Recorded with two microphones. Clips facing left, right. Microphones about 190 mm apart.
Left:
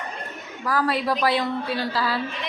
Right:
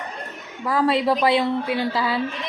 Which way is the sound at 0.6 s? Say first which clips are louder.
Right 4 dB; 25° right (ahead or behind).